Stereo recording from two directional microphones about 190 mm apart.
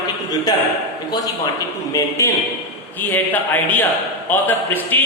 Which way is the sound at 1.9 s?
15° left (ahead or behind).